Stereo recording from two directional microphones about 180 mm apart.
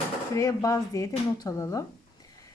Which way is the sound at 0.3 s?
15° left (ahead or behind).